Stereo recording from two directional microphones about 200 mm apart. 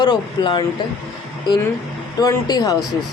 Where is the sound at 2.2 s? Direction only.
20° left (ahead or behind).